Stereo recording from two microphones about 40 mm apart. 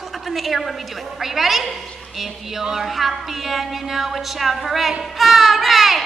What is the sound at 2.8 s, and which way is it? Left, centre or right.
A woman's voice, centre.